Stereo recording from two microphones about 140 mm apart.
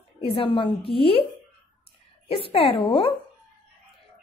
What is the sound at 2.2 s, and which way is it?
Speech, 45° left (ahead or behind).